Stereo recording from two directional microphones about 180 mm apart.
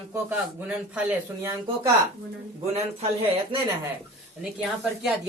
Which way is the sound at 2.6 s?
35° right (ahead or behind).